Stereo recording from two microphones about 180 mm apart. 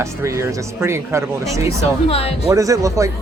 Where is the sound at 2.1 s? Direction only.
35° left (ahead or behind).